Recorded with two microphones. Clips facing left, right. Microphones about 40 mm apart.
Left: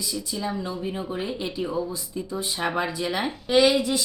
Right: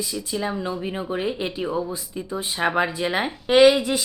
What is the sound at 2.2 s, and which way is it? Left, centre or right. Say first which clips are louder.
Speech: right 3 dB; right.